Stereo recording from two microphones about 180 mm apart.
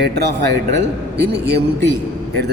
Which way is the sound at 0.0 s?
65° right (ahead or behind).